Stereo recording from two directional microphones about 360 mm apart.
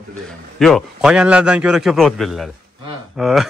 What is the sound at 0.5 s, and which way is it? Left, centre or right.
A man's voice, centre.